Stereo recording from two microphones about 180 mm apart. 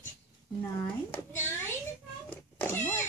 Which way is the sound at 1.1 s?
10° left (ahead or behind).